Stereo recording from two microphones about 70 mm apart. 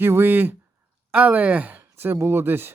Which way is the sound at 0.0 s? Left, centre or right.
Right.